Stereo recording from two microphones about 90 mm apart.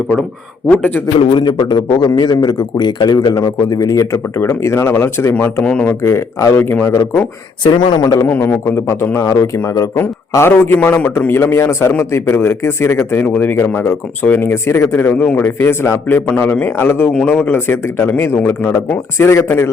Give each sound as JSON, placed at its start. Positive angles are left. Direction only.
{"t": 0.7, "sound": "a man's voice", "side_deg": 20}
{"t": 1.4, "sound": "a man's voice", "side_deg": 55}
{"t": 7.6, "sound": "speech", "side_deg": 55}
{"t": 8.2, "sound": "a man's voice", "side_deg": 25}
{"t": 9.2, "sound": "speech", "side_deg": 40}
{"t": 10.0, "sound": "a man's voice", "side_deg": 25}
{"t": 11.3, "sound": "a man's voice", "side_deg": 30}